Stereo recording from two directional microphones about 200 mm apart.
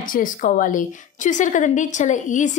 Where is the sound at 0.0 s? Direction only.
45° left (ahead or behind).